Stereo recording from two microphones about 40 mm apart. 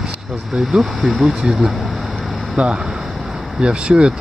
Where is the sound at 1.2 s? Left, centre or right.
Centre.